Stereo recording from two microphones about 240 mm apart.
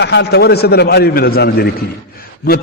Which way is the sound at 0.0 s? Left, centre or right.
Left.